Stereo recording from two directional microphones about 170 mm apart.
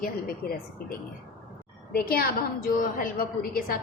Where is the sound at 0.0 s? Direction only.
60° left (ahead or behind).